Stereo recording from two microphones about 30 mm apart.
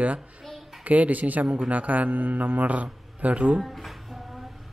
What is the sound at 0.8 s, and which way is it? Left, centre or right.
Speech, right.